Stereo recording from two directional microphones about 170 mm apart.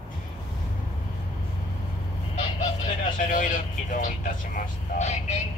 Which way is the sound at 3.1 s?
50° left (ahead or behind).